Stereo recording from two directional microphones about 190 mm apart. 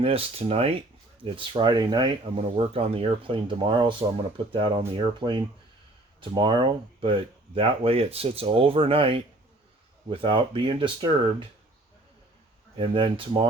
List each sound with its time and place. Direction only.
0.0 s speech: 30° right (ahead or behind)
12.7 s speech: 30° right (ahead or behind)